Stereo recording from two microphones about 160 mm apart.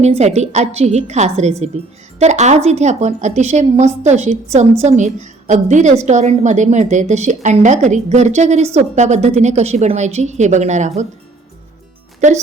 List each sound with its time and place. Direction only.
0.0 s a woman's voice: 45° right (ahead or behind)